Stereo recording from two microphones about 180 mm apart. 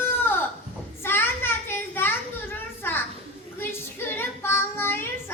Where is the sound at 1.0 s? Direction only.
10° left (ahead or behind).